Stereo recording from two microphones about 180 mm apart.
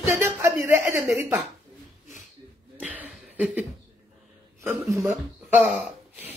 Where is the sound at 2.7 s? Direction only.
10° right (ahead or behind).